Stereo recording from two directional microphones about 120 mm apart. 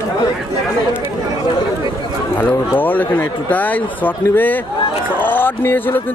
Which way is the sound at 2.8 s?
15° left (ahead or behind).